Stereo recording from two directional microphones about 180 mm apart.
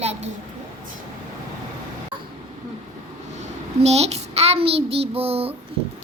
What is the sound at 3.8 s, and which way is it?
Child singing, 35° right (ahead or behind).